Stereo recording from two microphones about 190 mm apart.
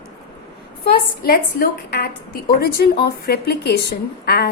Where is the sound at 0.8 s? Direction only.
55° left (ahead or behind).